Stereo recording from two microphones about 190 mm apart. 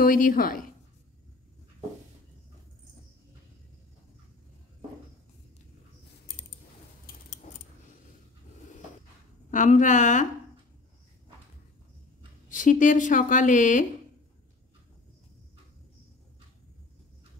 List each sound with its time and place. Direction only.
0.0 s speech: 50° left (ahead or behind)
7.1 s keys jangling: 40° left (ahead or behind)
9.5 s a woman's voice: 40° left (ahead or behind)
12.4 s speech: 45° left (ahead or behind)